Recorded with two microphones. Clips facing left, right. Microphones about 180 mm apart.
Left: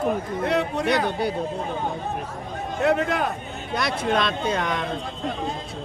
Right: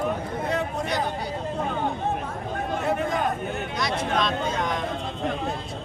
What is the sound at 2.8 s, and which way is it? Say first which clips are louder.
Speech: left 6 dB; 75° left (ahead or behind).